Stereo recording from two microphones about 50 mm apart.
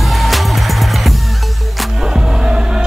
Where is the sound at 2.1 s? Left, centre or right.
Centre.